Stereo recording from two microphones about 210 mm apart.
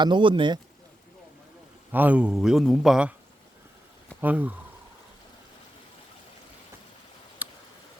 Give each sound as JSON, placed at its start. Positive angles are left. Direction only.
{"t": 0.0, "sound": "speech", "side_deg": -20}
{"t": 1.9, "sound": "a man's voice", "side_deg": -10}
{"t": 4.2, "sound": "speech", "side_deg": -10}
{"t": 7.4, "sound": "tick", "side_deg": -10}